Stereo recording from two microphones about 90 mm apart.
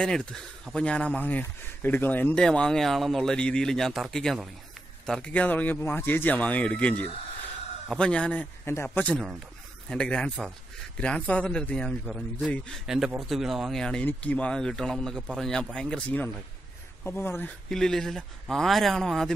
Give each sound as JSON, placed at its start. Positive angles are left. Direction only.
{"t": 0.0, "sound": "speech", "side_deg": 10}
{"t": 2.4, "sound": "speech", "side_deg": 10}
{"t": 8.6, "sound": "a man's voice", "side_deg": 25}
{"t": 9.8, "sound": "speech", "side_deg": 10}
{"t": 12.8, "sound": "a man's voice", "side_deg": -5}
{"t": 17.6, "sound": "speech", "side_deg": 5}